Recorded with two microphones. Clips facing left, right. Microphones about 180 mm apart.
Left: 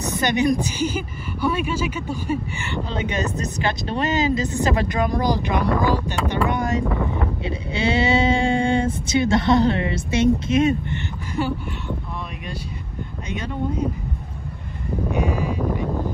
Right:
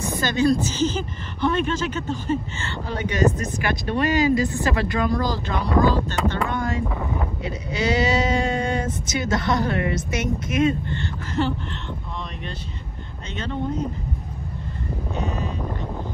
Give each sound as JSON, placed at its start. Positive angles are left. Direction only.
{"t": 0.2, "sound": "speech", "side_deg": 20}
{"t": 13.3, "sound": "speech", "side_deg": 10}
{"t": 15.0, "sound": "a sound", "side_deg": 10}